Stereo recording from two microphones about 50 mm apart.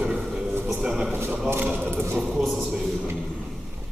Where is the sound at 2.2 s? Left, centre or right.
Centre.